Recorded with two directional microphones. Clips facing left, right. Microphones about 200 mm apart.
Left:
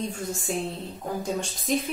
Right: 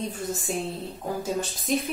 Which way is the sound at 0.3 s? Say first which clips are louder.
Even; centre (ahead or behind).